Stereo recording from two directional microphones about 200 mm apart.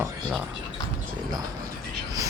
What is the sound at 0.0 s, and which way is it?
Speech, 5° right (ahead or behind).